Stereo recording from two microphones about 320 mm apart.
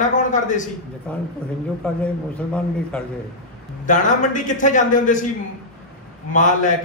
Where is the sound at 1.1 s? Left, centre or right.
Centre.